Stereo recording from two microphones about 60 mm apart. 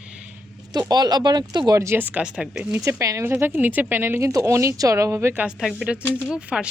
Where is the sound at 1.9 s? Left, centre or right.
Right.